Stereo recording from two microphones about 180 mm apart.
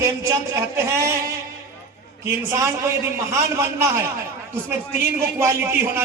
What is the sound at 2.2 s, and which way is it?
A man's voice, 15° right (ahead or behind).